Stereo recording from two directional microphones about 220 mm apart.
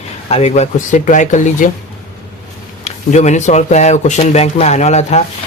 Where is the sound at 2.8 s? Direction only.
30° left (ahead or behind).